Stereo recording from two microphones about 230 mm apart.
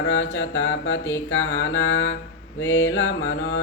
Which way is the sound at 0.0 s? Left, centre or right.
Left.